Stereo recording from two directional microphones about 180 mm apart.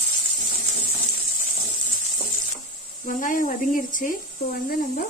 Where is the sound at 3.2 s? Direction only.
45° left (ahead or behind).